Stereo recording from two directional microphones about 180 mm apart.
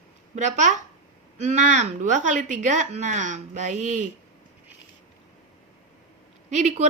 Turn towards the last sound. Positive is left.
turn(degrees=-40)  # may be behind; listen again after turning